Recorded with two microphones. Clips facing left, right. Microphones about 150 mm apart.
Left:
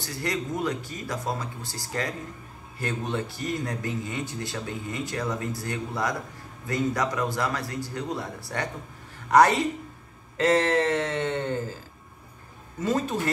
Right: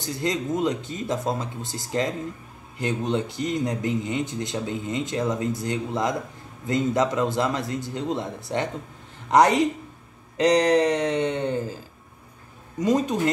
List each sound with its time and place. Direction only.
0.0 s speech: 20° right (ahead or behind)
12.7 s speech: 15° right (ahead or behind)